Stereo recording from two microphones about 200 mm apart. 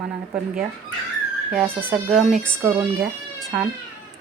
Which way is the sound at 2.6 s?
15° right (ahead or behind).